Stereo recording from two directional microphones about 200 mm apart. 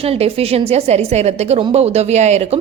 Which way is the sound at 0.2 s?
30° right (ahead or behind).